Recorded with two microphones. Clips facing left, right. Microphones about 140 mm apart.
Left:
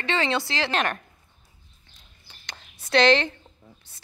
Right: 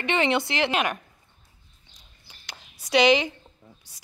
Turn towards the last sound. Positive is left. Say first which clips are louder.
# even
turn(degrees=-10)  # may be behind; listen again after turning